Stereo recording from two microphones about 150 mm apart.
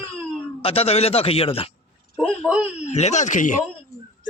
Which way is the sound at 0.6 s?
40° left (ahead or behind).